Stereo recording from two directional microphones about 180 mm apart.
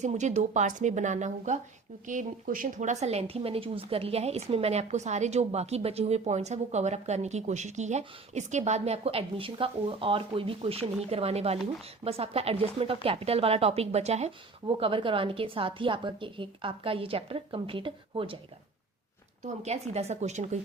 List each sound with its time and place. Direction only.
0.0 s a woman's voice: 40° right (ahead or behind)
19.6 s a woman's voice: 35° right (ahead or behind)